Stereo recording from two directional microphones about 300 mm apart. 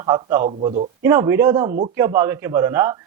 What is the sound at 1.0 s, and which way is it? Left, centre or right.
A man's voice, centre.